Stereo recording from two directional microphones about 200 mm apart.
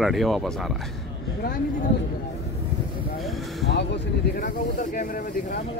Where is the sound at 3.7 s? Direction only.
55° left (ahead or behind).